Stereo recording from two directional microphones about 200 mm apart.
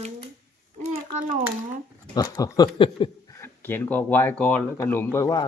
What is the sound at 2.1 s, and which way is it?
Speech, 20° left (ahead or behind).